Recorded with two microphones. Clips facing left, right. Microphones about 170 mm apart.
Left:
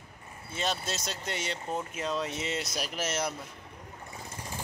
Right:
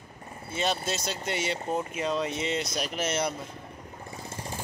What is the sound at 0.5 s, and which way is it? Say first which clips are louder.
A man's voice: right 4 dB; centre (ahead or behind).